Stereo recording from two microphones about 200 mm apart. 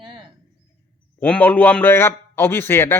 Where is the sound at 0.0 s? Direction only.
25° right (ahead or behind).